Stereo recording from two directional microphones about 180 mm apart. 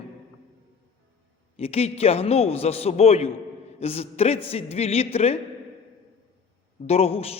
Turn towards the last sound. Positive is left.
turn(degrees=35)  # may be behind; listen again after turning